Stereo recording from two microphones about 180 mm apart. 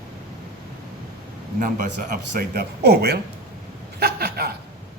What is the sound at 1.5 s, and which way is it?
A man's voice, 50° right (ahead or behind).